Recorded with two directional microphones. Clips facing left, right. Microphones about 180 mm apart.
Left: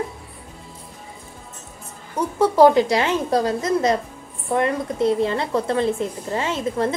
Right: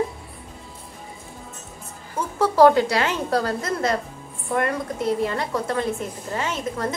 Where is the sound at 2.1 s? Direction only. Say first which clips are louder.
Left 3 dB; 20° left (ahead or behind).